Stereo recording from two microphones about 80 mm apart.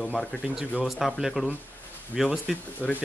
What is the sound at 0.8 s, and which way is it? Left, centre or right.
Speech, centre.